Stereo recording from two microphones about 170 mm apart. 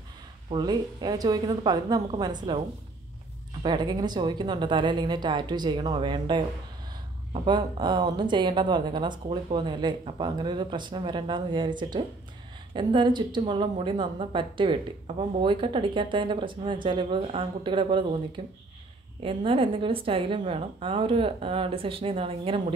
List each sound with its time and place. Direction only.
0.5 s a woman's voice: 25° right (ahead or behind)
3.6 s a woman's voice: 25° right (ahead or behind)
7.4 s a woman's voice: 25° right (ahead or behind)